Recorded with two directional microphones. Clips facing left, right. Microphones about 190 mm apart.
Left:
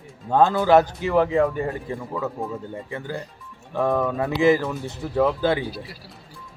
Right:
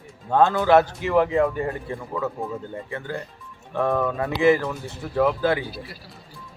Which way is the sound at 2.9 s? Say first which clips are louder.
Even; 15° left (ahead or behind).